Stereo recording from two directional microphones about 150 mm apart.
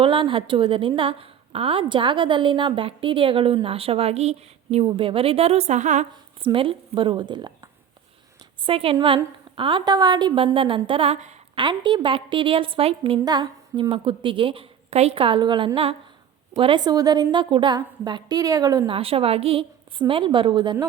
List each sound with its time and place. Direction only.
0.0 s a woman's voice: 35° right (ahead or behind); by 6.1 s 50° right (ahead or behind)
6.4 s a woman's voice: 35° right (ahead or behind)
11.5 s a woman's voice: 30° right (ahead or behind)
13.2 s a woman's voice: 30° right (ahead or behind)
18.9 s a woman's voice: 40° right (ahead or behind)